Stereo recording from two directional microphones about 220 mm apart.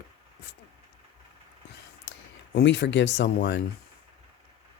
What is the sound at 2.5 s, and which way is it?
Speech, 50° left (ahead or behind).